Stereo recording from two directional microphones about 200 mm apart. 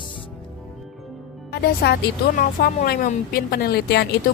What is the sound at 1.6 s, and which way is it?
Speech, 55° left (ahead or behind).